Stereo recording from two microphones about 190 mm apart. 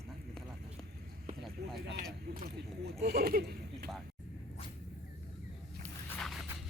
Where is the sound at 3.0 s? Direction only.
50° right (ahead or behind).